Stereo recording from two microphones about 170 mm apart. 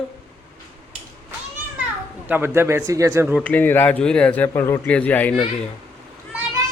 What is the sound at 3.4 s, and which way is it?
Speech, 10° left (ahead or behind).